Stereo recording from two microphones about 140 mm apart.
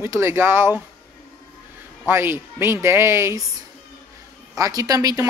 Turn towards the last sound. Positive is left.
turn(degrees=-25)  # may be behind; listen again after turning